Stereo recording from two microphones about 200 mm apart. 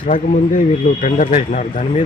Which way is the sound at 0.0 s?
40° left (ahead or behind).